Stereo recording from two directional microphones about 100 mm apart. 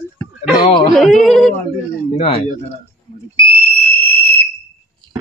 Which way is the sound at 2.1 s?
80° left.